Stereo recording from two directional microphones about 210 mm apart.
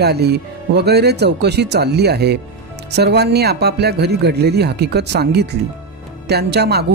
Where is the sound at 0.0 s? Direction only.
50° right (ahead or behind).